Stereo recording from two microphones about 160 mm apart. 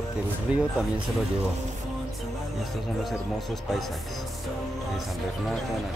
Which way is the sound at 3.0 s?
Centre (ahead or behind).